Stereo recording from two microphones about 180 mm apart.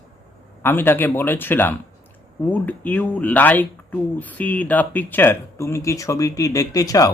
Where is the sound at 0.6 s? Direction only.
10° left (ahead or behind).